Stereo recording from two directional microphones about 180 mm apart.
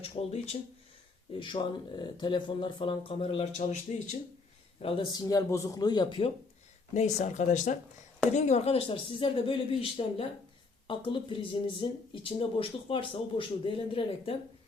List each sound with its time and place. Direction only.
0.0 s speech: 35° left (ahead or behind)
4.8 s speech: 30° left (ahead or behind)
6.9 s speech: 40° left (ahead or behind)